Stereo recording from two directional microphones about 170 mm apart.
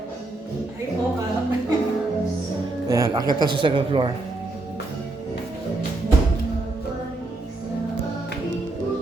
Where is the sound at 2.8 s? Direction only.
20° right (ahead or behind).